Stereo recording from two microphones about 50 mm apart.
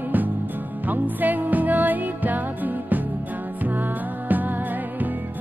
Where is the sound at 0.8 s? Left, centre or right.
Right.